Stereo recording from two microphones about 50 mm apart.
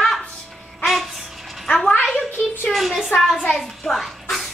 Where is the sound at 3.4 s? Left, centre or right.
Centre.